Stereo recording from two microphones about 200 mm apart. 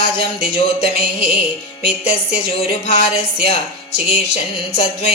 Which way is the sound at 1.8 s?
30° left (ahead or behind).